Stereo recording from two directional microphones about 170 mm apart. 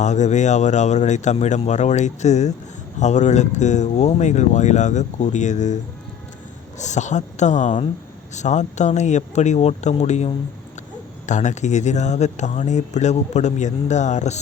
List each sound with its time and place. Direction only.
0.0 s speech: 45° left (ahead or behind)
6.7 s speech: 45° left (ahead or behind)